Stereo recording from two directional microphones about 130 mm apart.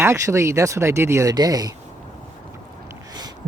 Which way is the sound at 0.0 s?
20° right (ahead or behind).